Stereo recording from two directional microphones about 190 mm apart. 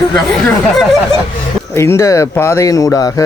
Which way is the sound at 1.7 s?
15° left (ahead or behind).